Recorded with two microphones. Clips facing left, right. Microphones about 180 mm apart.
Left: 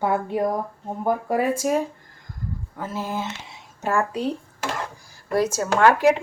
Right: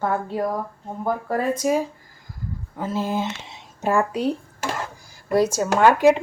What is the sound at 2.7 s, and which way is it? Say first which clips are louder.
Speech: right 5 dB; 20° right (ahead or behind).